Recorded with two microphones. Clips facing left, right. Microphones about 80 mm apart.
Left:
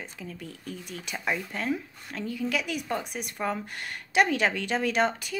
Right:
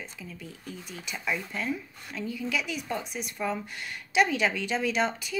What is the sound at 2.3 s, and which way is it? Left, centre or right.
Speech, left.